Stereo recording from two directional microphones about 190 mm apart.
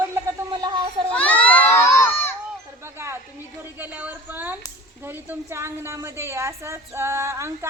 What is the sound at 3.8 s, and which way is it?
A woman's voice, 10° right (ahead or behind).